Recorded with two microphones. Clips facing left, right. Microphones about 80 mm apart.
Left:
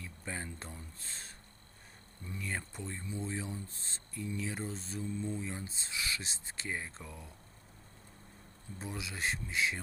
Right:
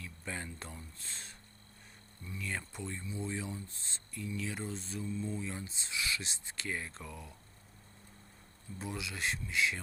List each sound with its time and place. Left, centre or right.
0.0 s a sound: left
2.2 s speech: left
5.4 s speech: left
8.8 s speech: left